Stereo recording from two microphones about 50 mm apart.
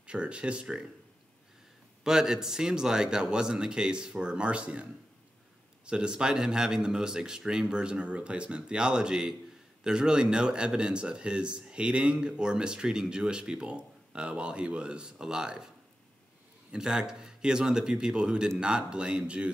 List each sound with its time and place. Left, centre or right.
0.0 s a man's voice: right
2.0 s speech: centre
5.9 s speech: centre
16.7 s a man's voice: centre